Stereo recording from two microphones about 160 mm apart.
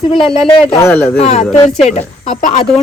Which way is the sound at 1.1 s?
40° left (ahead or behind).